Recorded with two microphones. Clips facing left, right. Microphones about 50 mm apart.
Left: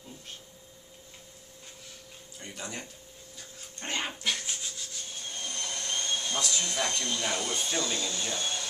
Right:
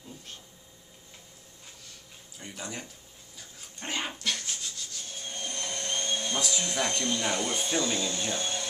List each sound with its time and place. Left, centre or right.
2.3 s speech: centre
3.3 s dog: centre
4.2 s rub: centre
5.2 s vacuum cleaner: right
6.4 s speech: centre
7.3 s speech: right